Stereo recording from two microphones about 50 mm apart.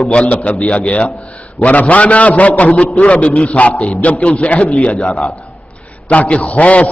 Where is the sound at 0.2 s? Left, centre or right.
Left.